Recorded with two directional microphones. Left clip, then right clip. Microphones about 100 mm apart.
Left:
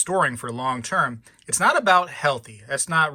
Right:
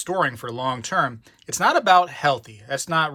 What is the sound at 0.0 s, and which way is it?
Speech, 30° right (ahead or behind).